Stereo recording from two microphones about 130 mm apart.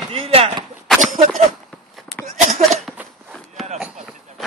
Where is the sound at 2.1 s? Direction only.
Centre (ahead or behind).